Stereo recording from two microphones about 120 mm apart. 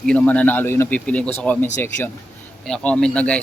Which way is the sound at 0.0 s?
5° left (ahead or behind).